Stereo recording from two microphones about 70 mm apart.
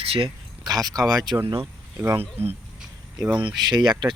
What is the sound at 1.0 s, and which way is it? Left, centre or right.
Speech, right.